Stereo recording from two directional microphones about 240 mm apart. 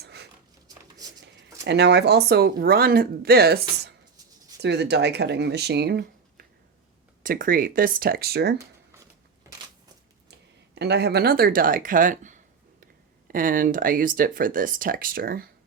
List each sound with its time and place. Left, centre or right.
0.0 s dog: right
1.2 s speech: right
4.6 s speech: right
10.8 s speech: right